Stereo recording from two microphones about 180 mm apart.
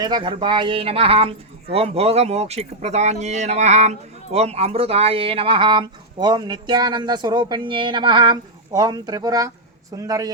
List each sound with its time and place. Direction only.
0.0 s a man's voice: 25° right (ahead or behind)